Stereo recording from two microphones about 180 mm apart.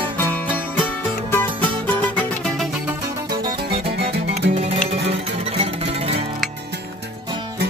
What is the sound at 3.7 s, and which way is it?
Music, 35° right (ahead or behind).